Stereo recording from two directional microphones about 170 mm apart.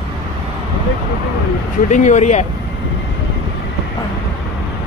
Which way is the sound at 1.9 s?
45° left (ahead or behind).